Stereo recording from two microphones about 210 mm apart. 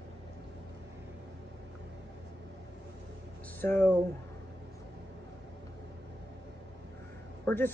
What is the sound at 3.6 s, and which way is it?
Speech, 10° left (ahead or behind).